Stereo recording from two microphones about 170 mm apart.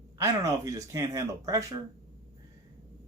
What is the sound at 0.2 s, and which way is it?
Speech, 20° right (ahead or behind).